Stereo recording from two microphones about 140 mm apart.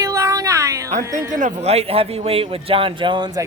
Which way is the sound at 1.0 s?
20° right (ahead or behind).